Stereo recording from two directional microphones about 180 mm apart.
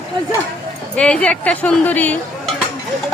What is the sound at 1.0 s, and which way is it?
Speech, 5° left (ahead or behind).